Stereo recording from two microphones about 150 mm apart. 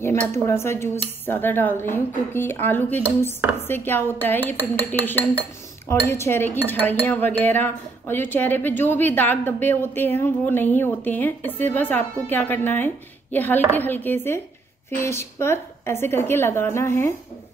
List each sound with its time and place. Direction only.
0.3 s speech: 15° left (ahead or behind)